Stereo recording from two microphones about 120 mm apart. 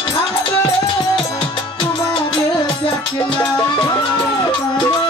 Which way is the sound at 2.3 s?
45° left (ahead or behind).